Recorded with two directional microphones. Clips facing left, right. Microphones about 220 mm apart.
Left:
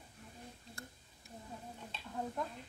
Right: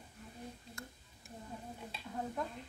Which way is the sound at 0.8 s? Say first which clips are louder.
Even; 30° left (ahead or behind).